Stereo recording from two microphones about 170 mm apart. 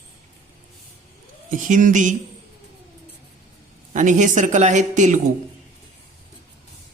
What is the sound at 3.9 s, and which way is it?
A woman's voice, 45° right (ahead or behind).